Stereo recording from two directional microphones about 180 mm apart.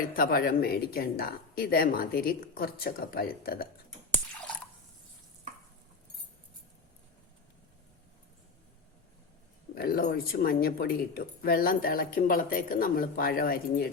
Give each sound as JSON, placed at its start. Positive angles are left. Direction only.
{"t": 0.0, "sound": "speech", "side_deg": 55}
{"t": 9.7, "sound": "speech", "side_deg": 55}